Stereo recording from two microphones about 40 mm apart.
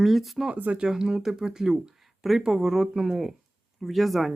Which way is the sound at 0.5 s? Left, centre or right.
Right.